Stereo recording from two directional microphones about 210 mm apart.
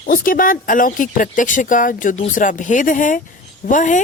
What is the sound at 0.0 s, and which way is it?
Speech, 40° left (ahead or behind).